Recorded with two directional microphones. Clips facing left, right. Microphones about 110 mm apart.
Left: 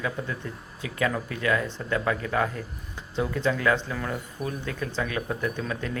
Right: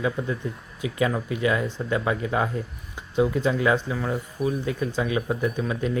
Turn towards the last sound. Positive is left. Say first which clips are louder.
# right 4 dB
turn(degrees=-20)  # may be behind; listen again after turning